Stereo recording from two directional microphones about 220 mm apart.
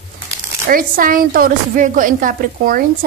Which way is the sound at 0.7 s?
40° right (ahead or behind).